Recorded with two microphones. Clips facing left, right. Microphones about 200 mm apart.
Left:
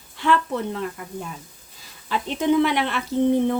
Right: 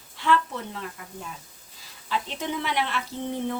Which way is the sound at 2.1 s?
55° left (ahead or behind).